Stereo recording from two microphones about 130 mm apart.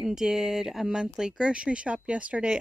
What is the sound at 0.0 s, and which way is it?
Speech, 5° right (ahead or behind).